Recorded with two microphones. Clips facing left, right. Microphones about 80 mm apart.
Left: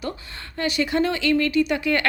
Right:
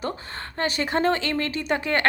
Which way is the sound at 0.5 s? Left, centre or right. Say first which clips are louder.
Left 2 dB; right.